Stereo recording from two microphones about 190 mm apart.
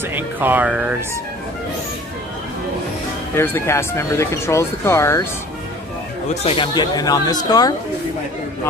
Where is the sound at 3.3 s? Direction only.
10° left (ahead or behind).